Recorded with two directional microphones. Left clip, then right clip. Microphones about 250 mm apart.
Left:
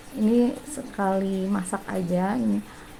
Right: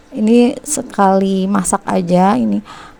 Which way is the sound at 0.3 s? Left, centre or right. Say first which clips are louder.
Right 13 dB; right.